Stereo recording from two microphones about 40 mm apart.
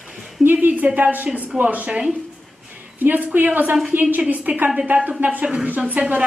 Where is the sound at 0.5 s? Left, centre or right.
Right.